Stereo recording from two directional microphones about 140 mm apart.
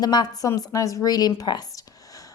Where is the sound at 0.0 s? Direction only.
30° left (ahead or behind).